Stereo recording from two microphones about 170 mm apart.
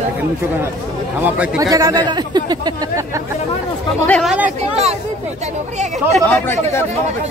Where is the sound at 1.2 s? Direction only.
5° right (ahead or behind).